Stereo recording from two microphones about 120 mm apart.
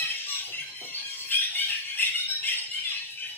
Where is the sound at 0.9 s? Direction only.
15° left (ahead or behind).